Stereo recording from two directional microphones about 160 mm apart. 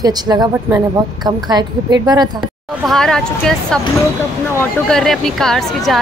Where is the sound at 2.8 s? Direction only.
5° left (ahead or behind).